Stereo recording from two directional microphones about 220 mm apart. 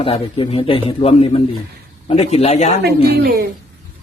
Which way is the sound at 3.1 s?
45° right (ahead or behind).